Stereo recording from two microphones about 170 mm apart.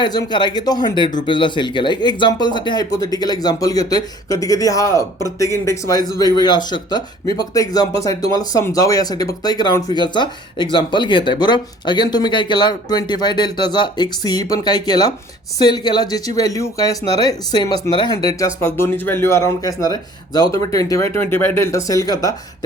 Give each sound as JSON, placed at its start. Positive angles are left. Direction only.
{"t": 0.0, "sound": "speech", "side_deg": 25}